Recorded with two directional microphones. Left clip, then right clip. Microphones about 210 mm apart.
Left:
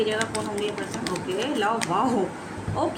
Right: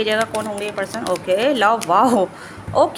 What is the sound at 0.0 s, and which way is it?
Speech, 50° right (ahead or behind).